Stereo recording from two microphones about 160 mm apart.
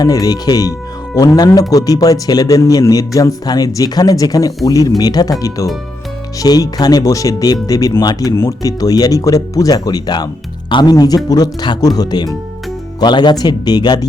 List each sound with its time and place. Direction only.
0.0 s speech: 25° left (ahead or behind)